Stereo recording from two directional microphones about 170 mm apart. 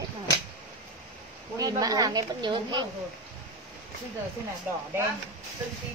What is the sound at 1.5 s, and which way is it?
Speech, 20° right (ahead or behind).